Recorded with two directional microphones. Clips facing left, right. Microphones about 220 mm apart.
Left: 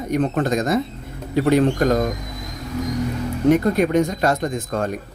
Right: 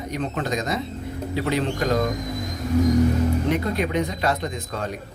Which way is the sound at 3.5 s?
45° left (ahead or behind).